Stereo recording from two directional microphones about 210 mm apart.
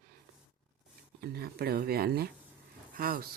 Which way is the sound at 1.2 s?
50° right (ahead or behind).